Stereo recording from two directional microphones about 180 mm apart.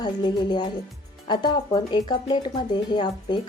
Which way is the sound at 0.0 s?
25° left (ahead or behind).